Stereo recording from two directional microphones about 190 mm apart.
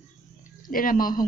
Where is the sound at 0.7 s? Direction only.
45° left (ahead or behind).